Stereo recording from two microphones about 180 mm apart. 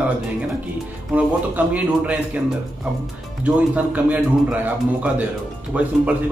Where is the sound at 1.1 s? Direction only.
10° right (ahead or behind).